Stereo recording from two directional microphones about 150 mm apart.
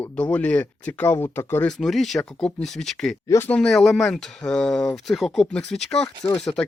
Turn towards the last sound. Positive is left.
turn(degrees=5)  # may be behind; listen again after turning